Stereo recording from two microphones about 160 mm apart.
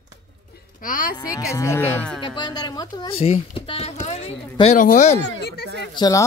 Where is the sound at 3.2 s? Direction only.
35° left (ahead or behind).